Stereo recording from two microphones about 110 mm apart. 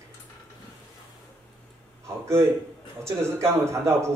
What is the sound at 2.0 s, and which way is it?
A man's voice, 25° right (ahead or behind).